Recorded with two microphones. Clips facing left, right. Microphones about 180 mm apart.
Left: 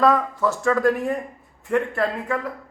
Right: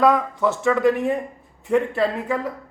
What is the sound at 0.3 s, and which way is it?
Speech, 20° right (ahead or behind).